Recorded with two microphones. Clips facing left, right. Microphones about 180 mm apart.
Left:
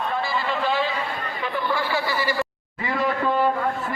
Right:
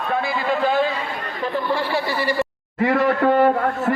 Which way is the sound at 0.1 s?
55° right (ahead or behind).